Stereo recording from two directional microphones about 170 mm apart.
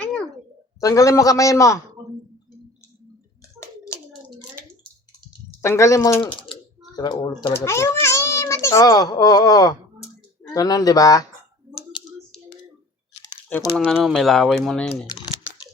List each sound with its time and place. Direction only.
0.0 s a sound: 5° left (ahead or behind)
0.8 s a man's voice: 20° left (ahead or behind)
5.6 s a child's voice: 15° left (ahead or behind)
11.9 s typing: 30° left (ahead or behind)
13.9 s speech: centre (ahead or behind)